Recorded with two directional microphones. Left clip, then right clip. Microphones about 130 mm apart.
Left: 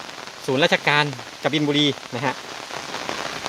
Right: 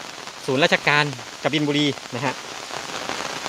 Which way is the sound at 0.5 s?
Centre (ahead or behind).